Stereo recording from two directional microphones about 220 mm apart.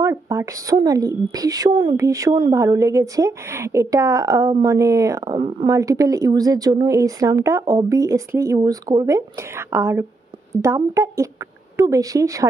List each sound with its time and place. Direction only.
0.0 s a woman's voice: 10° right (ahead or behind)